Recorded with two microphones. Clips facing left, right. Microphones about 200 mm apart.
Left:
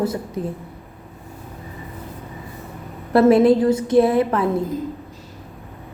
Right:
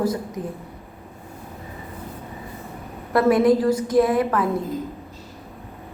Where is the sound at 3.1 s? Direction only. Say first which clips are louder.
Left 4 dB; 25° left (ahead or behind).